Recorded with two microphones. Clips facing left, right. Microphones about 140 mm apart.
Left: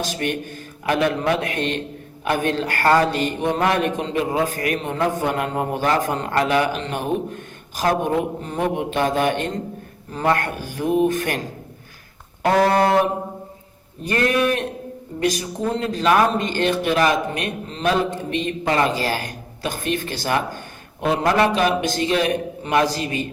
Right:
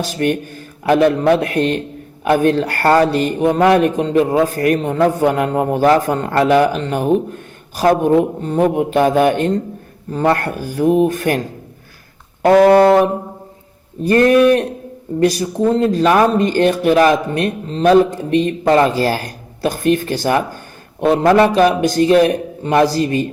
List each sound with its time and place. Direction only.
0.2 s a man's voice: 45° right (ahead or behind)
10.1 s a man's voice: 35° right (ahead or behind)
12.4 s speech: 50° right (ahead or behind)
14.1 s a man's voice: 45° right (ahead or behind)